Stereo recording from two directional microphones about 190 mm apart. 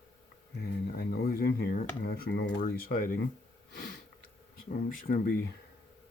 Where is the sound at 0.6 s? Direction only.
60° left (ahead or behind).